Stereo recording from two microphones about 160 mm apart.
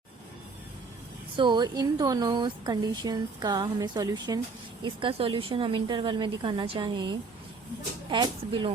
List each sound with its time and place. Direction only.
1.4 s speech: 30° right (ahead or behind)